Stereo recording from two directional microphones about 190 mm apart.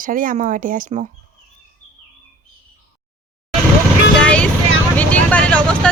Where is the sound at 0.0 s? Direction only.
45° right (ahead or behind).